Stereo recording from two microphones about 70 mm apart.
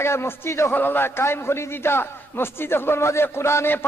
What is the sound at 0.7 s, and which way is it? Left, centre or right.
A man's voice, left.